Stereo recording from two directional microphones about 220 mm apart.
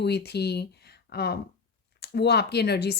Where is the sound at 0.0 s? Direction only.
50° left (ahead or behind).